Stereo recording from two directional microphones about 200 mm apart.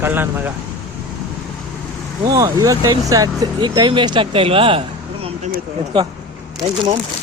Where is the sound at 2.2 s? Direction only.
20° right (ahead or behind).